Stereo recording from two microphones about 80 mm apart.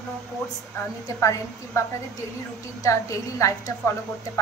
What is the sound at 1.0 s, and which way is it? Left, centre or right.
Speech, left.